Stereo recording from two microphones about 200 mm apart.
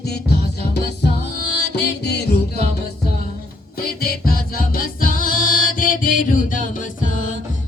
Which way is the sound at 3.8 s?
50° left (ahead or behind).